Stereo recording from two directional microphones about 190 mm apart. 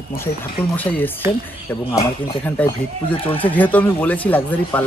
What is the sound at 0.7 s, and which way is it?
Speech, 10° left (ahead or behind).